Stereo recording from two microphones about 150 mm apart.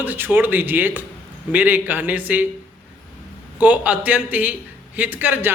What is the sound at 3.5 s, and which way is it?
Speech, 10° right (ahead or behind).